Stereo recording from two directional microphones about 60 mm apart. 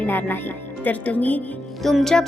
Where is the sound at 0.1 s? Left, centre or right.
Left.